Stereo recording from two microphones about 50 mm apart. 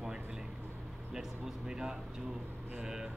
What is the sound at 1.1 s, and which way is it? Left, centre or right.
Speech, centre.